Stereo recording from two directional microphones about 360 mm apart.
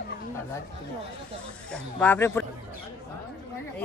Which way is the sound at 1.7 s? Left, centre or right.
Centre.